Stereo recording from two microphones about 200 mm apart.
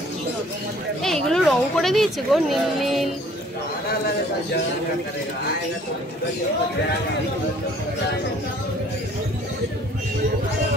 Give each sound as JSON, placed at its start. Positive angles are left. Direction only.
{"t": 1.0, "sound": "speech", "side_deg": 0}